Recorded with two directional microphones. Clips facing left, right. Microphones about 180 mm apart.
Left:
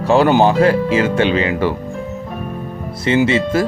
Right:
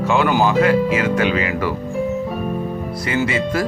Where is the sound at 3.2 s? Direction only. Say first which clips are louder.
Left 4 dB; 25° left (ahead or behind).